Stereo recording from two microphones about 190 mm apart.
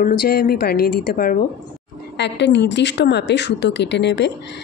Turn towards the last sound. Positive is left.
turn(degrees=65)  # may be behind; listen again after turning